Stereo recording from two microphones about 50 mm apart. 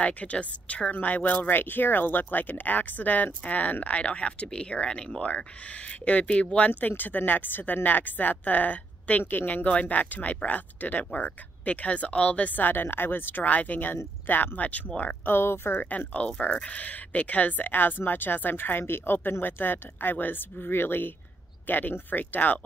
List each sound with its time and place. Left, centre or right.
0.0 s a woman's voice: left
0.9 s a woman's voice: left
6.7 s speech: left
9.2 s speech: left
15.2 s speech: left
16.1 s a woman's voice: left